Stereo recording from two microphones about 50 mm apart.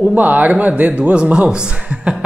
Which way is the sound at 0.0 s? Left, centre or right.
Right.